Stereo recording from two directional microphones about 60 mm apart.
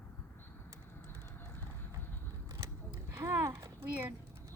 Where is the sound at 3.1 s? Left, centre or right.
Right.